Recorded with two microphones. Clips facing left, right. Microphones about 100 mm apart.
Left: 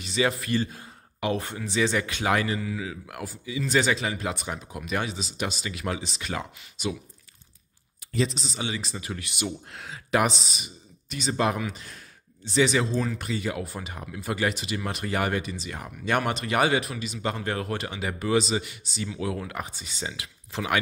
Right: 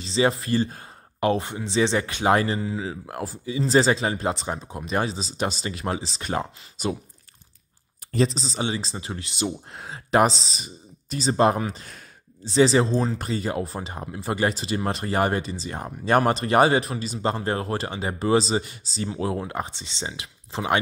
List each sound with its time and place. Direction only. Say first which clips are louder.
0.0 s speech: right 4 dB; 30° right (ahead or behind)
8.1 s speech: right 4 dB; 35° right (ahead or behind)